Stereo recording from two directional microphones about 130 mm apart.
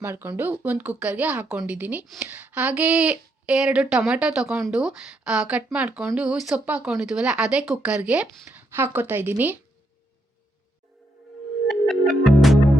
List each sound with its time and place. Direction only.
0.0 s a woman's voice: 20° right (ahead or behind)
11.7 s music: centre (ahead or behind)